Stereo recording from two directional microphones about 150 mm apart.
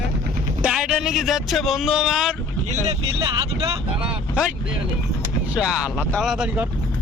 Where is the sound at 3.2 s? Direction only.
30° right (ahead or behind).